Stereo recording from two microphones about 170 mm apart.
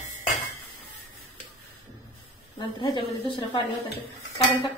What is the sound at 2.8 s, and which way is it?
Speech, 30° left (ahead or behind).